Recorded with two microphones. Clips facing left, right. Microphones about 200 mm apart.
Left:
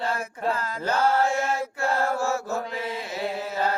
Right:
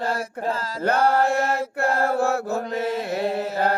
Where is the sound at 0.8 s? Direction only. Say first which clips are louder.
Right 3 dB; 60° right (ahead or behind).